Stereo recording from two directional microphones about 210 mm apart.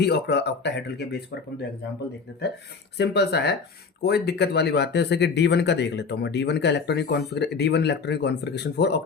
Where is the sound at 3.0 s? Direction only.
50° left (ahead or behind).